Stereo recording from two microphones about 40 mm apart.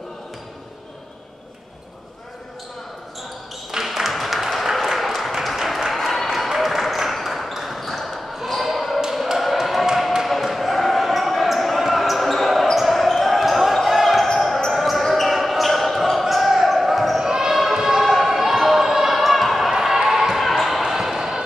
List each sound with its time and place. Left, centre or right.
3.7 s applause: centre
6.1 s basketball bounce: centre
7.5 s a sound: centre
8.5 s basketball bounce: centre
9.4 s a sound: centre
10.4 s basketball bounce: centre
17.3 s basketball bounce: centre